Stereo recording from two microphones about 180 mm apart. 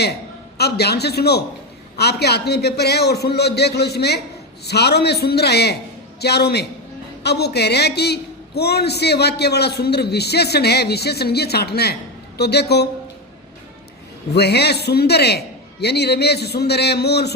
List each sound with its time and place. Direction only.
0.5 s a man's voice: 65° left (ahead or behind)
14.3 s a man's voice: 65° left (ahead or behind)